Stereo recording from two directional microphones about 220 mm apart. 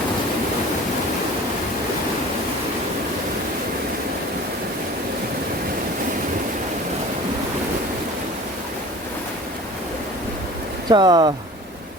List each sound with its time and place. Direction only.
10.8 s speech: 20° right (ahead or behind)